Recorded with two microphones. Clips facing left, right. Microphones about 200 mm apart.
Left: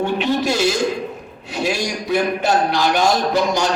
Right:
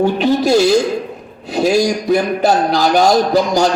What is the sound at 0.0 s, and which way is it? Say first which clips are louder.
Speech: right 5 dB; 40° right (ahead or behind).